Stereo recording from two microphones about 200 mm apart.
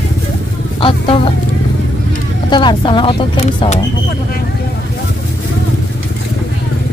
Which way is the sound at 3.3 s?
35° left (ahead or behind).